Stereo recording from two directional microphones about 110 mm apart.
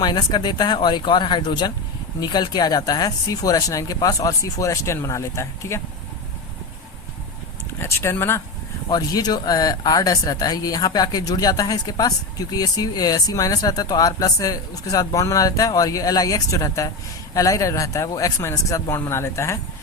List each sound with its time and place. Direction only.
0.0 s speech: 40° left (ahead or behind)
7.8 s speech: 25° left (ahead or behind)
8.9 s speech: 35° left (ahead or behind)